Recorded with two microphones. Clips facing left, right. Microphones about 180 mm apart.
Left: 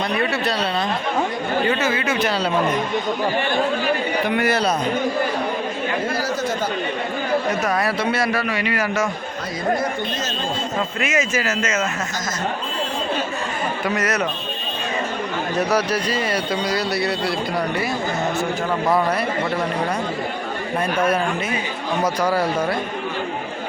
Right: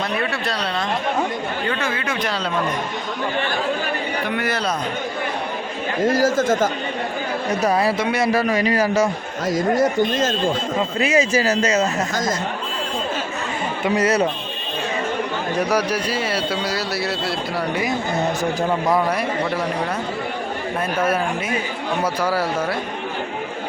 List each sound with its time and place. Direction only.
0.2 s speech: centre (ahead or behind)
1.8 s speech: 5° left (ahead or behind)
4.4 s a man's voice: 10° left (ahead or behind)
6.1 s speech: 45° right (ahead or behind)
7.6 s a man's voice: 30° right (ahead or behind)
7.9 s speech: 15° right (ahead or behind)
8.3 s speech: 40° right (ahead or behind)
11.0 s speech: 35° right (ahead or behind)
13.8 s a man's voice: 30° right (ahead or behind)
15.5 s speech: 10° right (ahead or behind)
22.0 s speech: 5° right (ahead or behind)